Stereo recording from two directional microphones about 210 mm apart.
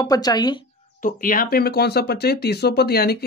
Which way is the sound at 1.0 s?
40° left (ahead or behind).